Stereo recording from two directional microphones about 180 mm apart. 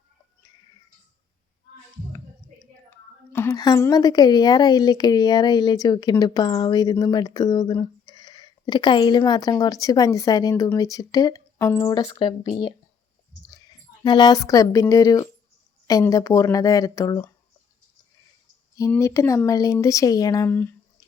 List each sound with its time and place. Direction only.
3.3 s a woman's voice: 15° left (ahead or behind)
14.0 s a woman's voice: 25° left (ahead or behind)
18.8 s speech: 15° left (ahead or behind)